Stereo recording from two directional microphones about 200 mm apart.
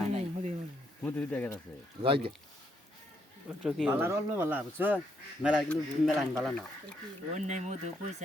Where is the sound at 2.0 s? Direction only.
25° right (ahead or behind).